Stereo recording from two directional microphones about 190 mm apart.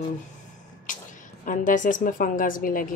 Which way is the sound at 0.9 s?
45° left (ahead or behind).